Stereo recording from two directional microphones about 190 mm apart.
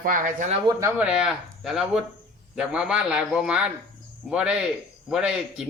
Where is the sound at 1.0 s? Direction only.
5° right (ahead or behind).